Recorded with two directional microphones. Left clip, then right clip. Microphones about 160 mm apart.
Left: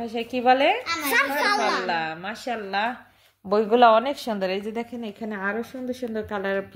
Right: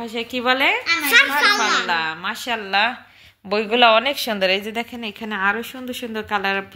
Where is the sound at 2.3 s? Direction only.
Centre (ahead or behind).